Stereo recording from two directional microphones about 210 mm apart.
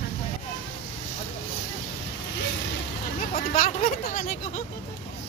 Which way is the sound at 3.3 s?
35° left (ahead or behind).